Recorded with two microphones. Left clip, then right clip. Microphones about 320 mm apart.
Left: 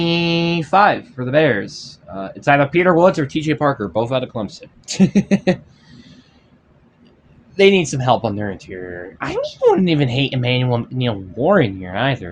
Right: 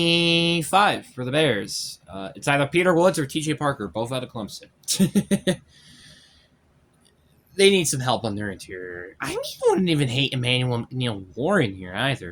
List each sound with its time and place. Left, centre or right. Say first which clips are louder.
0.0 s speech: left 1 dB; right
7.5 s speech: left 5 dB; right